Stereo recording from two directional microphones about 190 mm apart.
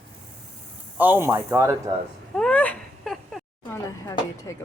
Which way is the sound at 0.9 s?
10° right (ahead or behind).